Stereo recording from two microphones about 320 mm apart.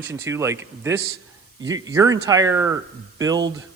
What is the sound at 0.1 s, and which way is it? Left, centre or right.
Speech, centre.